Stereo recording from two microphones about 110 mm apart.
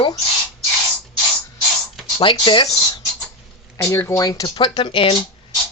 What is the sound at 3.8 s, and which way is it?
Speech, 25° left (ahead or behind).